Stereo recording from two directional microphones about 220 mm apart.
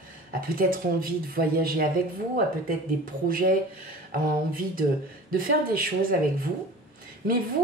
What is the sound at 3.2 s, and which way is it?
Speech, 40° right (ahead or behind).